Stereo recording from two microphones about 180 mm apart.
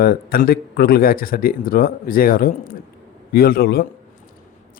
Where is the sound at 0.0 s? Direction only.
55° left (ahead or behind).